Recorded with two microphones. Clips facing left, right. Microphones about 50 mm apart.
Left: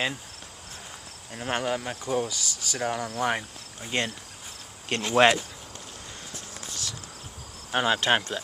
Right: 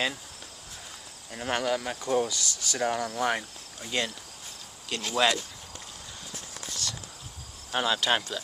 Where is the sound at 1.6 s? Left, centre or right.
Centre.